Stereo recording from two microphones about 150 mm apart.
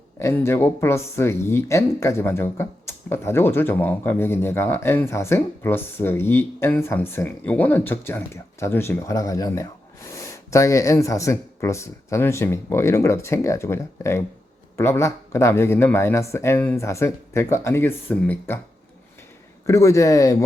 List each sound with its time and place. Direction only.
0.2 s speech: 20° left (ahead or behind)
19.6 s speech: 20° left (ahead or behind)